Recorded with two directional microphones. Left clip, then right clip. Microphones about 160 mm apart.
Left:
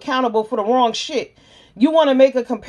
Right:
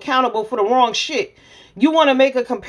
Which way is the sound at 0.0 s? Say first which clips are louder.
Right 1 dB; 30° left (ahead or behind).